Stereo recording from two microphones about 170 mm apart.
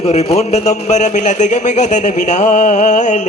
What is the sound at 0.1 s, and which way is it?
A man's voice, 40° left (ahead or behind).